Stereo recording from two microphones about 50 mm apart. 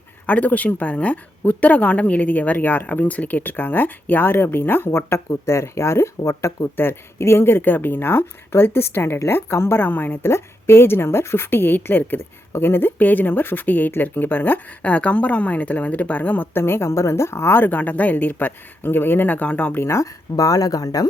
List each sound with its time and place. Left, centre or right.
0.3 s speech: left
4.9 s speech: left
7.2 s speech: left
9.7 s speech: left
10.2 s speech: left
11.5 s speech: left
13.0 s speech: left
14.8 s a woman's voice: left
16.6 s speech: left
17.6 s speech: left
20.3 s speech: left